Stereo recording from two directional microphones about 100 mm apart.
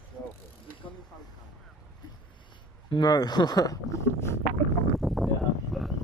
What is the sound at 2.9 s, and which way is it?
Speech, 45° left (ahead or behind).